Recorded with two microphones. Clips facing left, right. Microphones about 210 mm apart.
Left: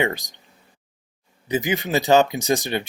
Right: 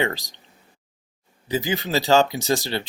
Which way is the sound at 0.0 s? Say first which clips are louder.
Left 1 dB; 15° left (ahead or behind).